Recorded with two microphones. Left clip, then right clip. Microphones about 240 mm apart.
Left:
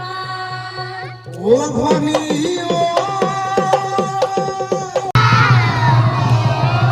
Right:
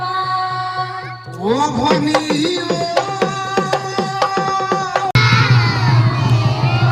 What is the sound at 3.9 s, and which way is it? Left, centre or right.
Music, centre.